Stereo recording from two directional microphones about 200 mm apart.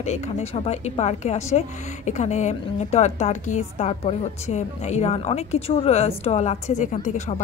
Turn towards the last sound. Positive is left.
turn(degrees=35)  # may be behind; listen again after turning